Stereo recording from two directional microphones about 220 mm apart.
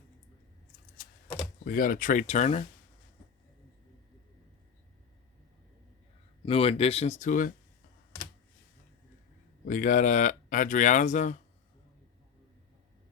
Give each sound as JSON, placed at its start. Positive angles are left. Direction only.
{"t": 1.6, "sound": "speech", "side_deg": 40}
{"t": 6.4, "sound": "speech", "side_deg": 25}
{"t": 9.6, "sound": "speech", "side_deg": 35}